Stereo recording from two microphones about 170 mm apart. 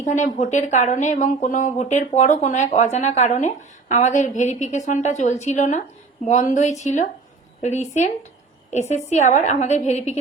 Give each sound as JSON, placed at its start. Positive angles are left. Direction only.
{"t": 0.0, "sound": "speech", "side_deg": 45}